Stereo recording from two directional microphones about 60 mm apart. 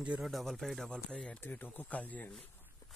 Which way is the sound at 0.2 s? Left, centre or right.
Centre.